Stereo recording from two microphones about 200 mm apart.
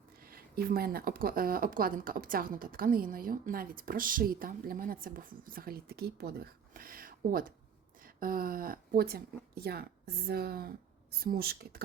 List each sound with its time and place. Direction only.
0.2 s speech: 50° right (ahead or behind)